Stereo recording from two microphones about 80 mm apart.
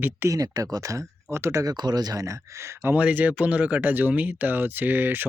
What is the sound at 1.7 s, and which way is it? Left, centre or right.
Speech, right.